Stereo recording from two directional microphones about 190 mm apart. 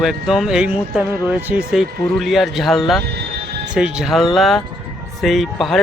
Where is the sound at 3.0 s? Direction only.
55° right (ahead or behind).